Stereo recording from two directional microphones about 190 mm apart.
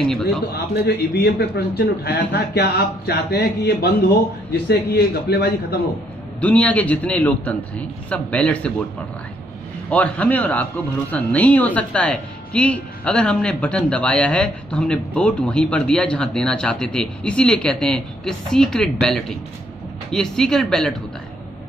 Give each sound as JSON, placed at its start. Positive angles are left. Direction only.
{"t": 0.5, "sound": "a man's voice", "side_deg": 55}
{"t": 6.4, "sound": "a man's voice", "side_deg": 5}
{"t": 9.8, "sound": "speech", "side_deg": 5}